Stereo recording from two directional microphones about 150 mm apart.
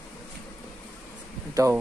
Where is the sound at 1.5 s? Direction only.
20° right (ahead or behind).